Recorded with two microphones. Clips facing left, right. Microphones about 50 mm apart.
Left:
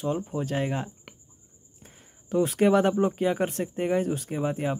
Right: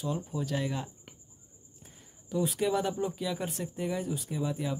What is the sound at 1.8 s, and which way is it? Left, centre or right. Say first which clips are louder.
Speech: left 4 dB; left.